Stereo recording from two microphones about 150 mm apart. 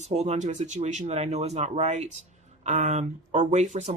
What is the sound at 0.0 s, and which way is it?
Speech, 45° right (ahead or behind).